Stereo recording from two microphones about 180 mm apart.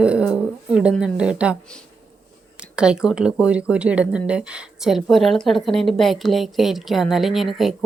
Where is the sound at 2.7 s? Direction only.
5° right (ahead or behind).